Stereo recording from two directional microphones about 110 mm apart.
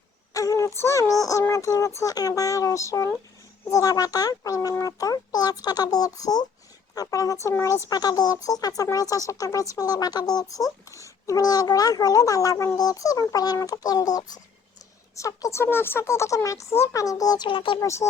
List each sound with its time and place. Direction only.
0.3 s a sound: 30° left (ahead or behind)
0.8 s speech: 25° left (ahead or behind); by 17.7 s 50° left (ahead or behind)
17.7 s speech: 25° left (ahead or behind)